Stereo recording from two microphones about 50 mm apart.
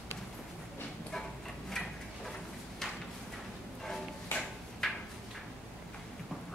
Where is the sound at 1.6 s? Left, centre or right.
Centre.